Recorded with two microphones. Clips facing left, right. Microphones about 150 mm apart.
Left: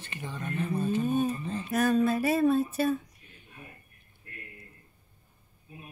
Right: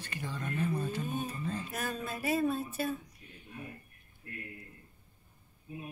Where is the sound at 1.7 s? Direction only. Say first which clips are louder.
Left 13 dB; 80° left.